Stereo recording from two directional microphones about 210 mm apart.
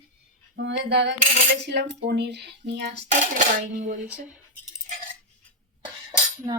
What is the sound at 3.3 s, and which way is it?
Speech, 40° right (ahead or behind).